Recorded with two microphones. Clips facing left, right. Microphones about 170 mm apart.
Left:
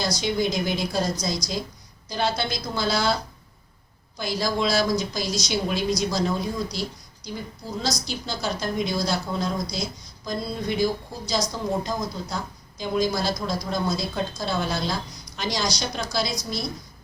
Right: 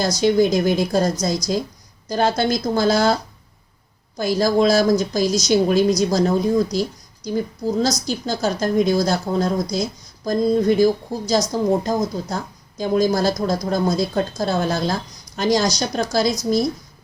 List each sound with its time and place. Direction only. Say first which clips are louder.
0.0 s speech: right 8 dB; 45° right (ahead or behind)
4.2 s speech: right 8 dB; 45° right (ahead or behind)